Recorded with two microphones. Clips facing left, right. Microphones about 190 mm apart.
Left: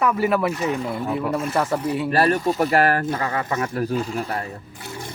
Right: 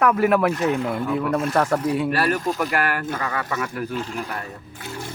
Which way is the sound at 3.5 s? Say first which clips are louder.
Left 4 dB; 40° left (ahead or behind).